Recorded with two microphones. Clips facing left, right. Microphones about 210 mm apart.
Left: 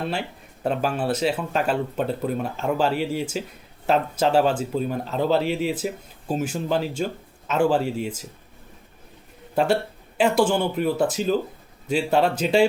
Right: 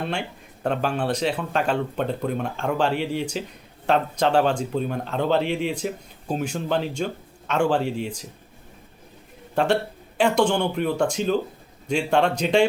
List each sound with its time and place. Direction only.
0.0 s speech: 5° left (ahead or behind)
7.8 s speech: 40° left (ahead or behind)
8.0 s speech: 5° left (ahead or behind)
10.2 s speech: 5° left (ahead or behind)